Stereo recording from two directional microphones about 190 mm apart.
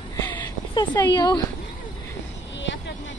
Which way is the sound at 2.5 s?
70° left (ahead or behind).